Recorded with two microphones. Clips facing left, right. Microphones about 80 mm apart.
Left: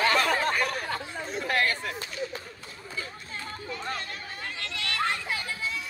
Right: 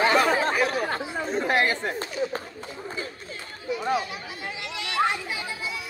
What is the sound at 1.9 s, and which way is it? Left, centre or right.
Speech, right.